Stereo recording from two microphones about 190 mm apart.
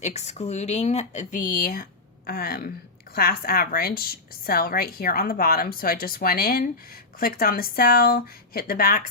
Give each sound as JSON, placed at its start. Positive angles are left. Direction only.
{"t": 0.0, "sound": "a woman's voice", "side_deg": 35}